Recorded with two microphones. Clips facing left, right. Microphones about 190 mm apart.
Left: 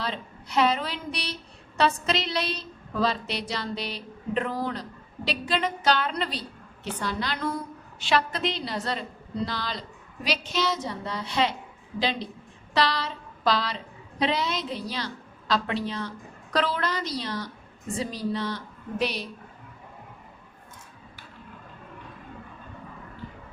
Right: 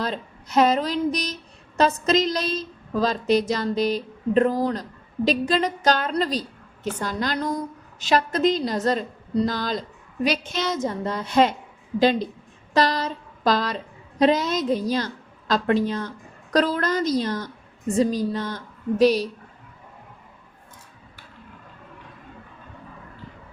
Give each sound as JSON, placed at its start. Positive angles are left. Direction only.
{"t": 0.0, "sound": "a woman's voice", "side_deg": -45}